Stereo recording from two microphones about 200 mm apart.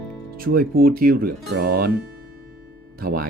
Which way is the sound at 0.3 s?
45° right (ahead or behind).